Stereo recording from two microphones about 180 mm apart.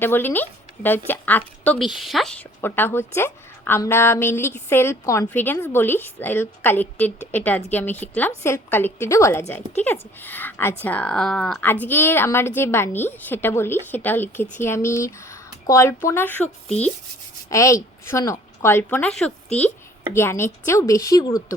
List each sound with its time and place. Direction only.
0.0 s a woman's voice: 10° left (ahead or behind)
2.6 s a woman's voice: 10° left (ahead or behind)
17.5 s a woman's voice: 15° left (ahead or behind)